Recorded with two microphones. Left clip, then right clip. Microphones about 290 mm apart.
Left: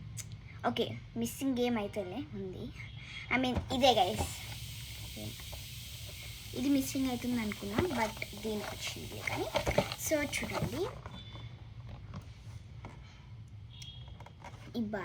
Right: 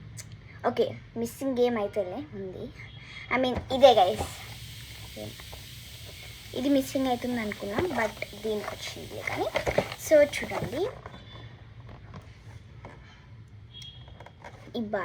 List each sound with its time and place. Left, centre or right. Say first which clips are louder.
0.2 s a woman's voice: right 5 dB; centre
14.2 s a sound: right 4 dB; centre
14.8 s speech: right 7 dB; centre